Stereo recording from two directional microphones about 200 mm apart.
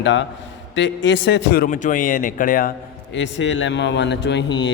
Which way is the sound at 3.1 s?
65° left (ahead or behind).